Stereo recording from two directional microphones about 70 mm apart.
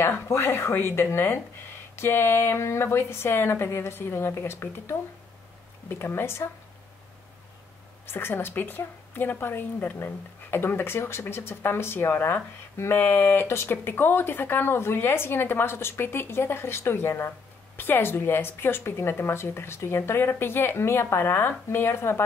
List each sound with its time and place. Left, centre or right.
0.0 s a woman's voice: left
8.1 s a woman's voice: left